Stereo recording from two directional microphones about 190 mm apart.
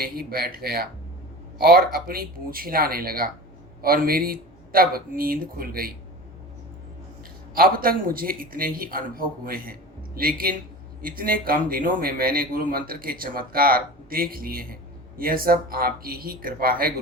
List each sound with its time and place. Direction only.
0.0 s a man's voice: 50° right (ahead or behind)
7.5 s a man's voice: 50° right (ahead or behind)